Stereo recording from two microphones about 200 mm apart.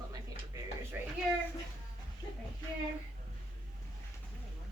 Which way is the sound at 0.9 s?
10° right (ahead or behind).